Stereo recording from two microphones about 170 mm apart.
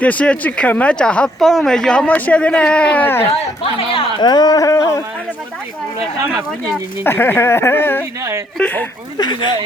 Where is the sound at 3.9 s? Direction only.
30° left (ahead or behind).